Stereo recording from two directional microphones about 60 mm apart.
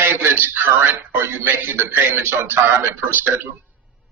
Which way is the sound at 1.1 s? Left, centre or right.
Right.